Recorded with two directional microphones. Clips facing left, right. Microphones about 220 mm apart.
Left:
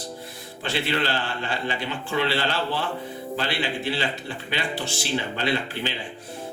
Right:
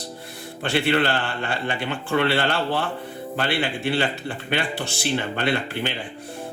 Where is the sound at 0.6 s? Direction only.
55° right (ahead or behind).